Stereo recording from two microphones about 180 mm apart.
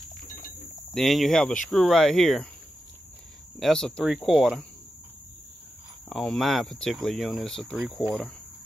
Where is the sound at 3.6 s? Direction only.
5° left (ahead or behind).